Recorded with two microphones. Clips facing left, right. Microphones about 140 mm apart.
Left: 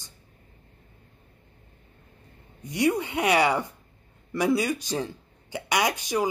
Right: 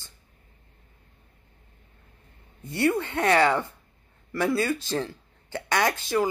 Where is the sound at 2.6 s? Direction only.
15° left (ahead or behind).